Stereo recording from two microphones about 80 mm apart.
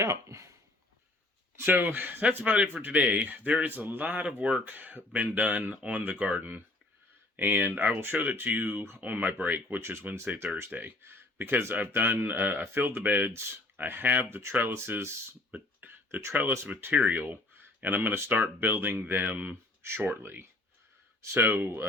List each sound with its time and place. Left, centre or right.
0.0 s speech: right
1.5 s speech: right
15.5 s a sound: right
17.1 s speech: right